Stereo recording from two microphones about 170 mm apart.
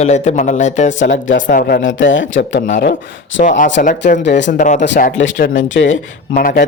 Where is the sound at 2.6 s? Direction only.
50° left (ahead or behind).